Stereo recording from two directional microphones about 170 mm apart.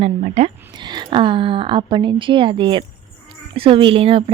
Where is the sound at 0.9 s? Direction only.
30° right (ahead or behind).